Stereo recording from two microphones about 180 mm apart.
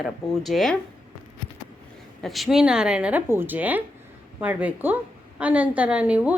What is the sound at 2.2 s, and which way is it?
Speech, centre (ahead or behind).